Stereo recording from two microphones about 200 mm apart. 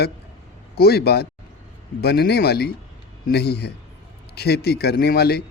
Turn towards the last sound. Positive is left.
turn(degrees=55)  # may be behind; listen again after turning